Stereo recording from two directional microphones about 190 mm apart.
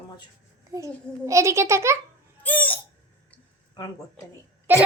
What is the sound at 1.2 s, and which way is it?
Speech, 15° right (ahead or behind).